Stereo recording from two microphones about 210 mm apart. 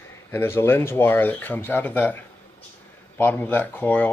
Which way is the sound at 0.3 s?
10° left (ahead or behind).